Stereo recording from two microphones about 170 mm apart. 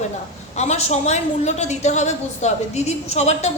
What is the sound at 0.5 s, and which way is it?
A woman's voice, 40° left (ahead or behind).